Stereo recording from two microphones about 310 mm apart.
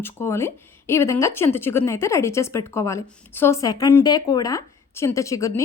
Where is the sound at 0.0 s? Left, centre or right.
Centre.